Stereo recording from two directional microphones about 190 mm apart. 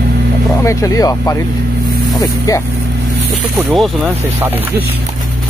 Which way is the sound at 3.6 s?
5° right (ahead or behind).